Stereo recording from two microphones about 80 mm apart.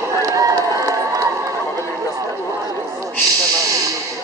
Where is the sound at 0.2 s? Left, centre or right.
Right.